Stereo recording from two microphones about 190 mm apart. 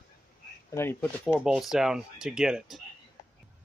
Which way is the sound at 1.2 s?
5° right (ahead or behind).